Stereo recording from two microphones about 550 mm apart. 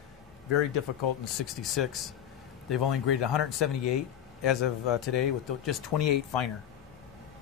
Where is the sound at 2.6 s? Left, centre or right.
Left.